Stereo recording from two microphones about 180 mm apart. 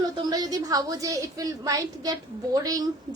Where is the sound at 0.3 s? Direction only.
20° right (ahead or behind).